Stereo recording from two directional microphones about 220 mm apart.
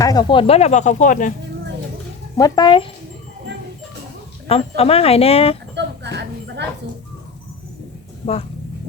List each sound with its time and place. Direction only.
0.0 s speech: 15° left (ahead or behind); by 1.3 s 35° left (ahead or behind)
2.4 s speech: 20° left (ahead or behind)
4.4 s speech: 25° left (ahead or behind)
5.7 s music: 50° right (ahead or behind)
8.2 s speech: 35° left (ahead or behind)